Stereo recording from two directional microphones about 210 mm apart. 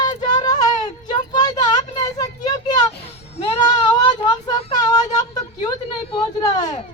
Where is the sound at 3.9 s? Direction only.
20° left (ahead or behind).